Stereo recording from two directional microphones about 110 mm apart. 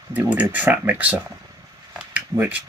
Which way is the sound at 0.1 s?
15° right (ahead or behind).